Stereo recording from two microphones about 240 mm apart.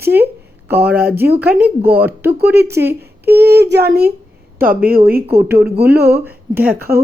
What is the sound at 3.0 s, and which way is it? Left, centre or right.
A child's voice, right.